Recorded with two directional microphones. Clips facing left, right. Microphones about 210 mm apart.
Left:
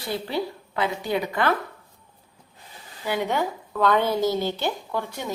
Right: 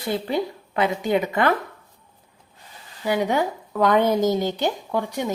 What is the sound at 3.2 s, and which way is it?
A woman's voice, 15° right (ahead or behind).